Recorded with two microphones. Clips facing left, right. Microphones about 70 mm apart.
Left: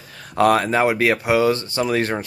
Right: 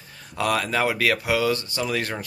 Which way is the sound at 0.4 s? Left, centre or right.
Left.